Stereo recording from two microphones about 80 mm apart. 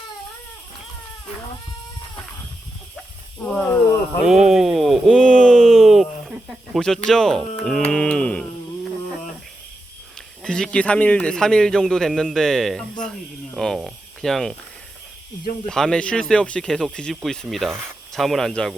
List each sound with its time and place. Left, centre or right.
3.4 s a man's voice: centre
4.3 s a sound: centre
6.7 s a man's voice: centre
10.2 s a man's voice: centre
15.6 s a man's voice: centre